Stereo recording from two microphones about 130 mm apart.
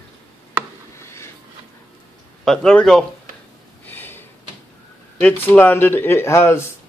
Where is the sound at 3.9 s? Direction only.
15° left (ahead or behind).